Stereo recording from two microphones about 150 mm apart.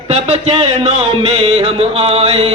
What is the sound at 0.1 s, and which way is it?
Speech, 45° right (ahead or behind).